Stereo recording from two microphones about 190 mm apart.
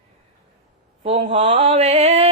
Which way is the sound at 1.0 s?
35° right (ahead or behind).